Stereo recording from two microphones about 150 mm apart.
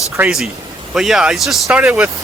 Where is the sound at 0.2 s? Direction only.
5° right (ahead or behind).